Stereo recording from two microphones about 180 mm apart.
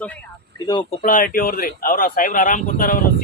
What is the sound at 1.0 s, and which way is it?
Speech, 50° left (ahead or behind).